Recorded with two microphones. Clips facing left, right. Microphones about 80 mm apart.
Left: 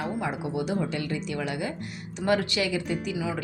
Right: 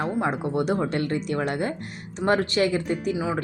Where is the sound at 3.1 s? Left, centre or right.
Right.